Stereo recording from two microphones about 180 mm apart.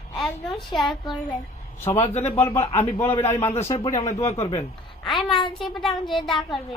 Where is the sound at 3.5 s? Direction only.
35° left (ahead or behind).